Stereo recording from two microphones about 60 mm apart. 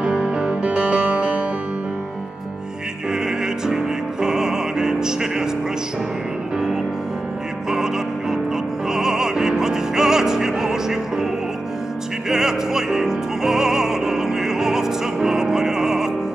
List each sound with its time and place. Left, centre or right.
0.0 s music: centre
0.7 s music: right
3.1 s music: centre
7.7 s music: centre
12.3 s music: centre